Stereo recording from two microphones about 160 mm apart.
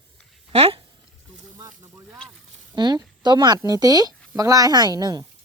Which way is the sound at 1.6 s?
25° right (ahead or behind).